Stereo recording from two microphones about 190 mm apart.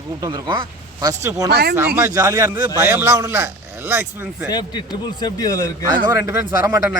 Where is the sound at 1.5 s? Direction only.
55° right (ahead or behind).